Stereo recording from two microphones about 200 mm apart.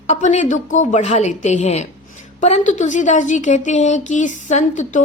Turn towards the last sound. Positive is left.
turn(degrees=35)  # may be behind; listen again after turning